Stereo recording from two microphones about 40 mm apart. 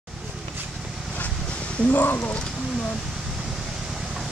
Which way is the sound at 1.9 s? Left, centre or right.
Left.